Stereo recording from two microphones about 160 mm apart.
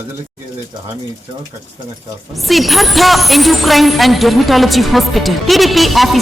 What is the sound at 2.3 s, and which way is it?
Speech, centre (ahead or behind).